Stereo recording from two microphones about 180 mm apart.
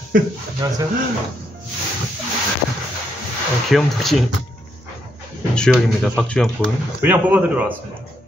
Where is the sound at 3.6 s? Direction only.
Centre (ahead or behind).